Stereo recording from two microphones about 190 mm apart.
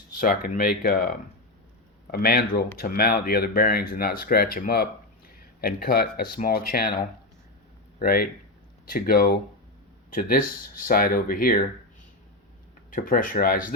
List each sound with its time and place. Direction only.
0.2 s speech: 50° left (ahead or behind)
12.9 s speech: 45° left (ahead or behind)